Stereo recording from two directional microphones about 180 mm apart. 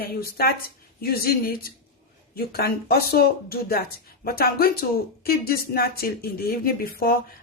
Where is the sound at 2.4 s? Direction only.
60° left (ahead or behind).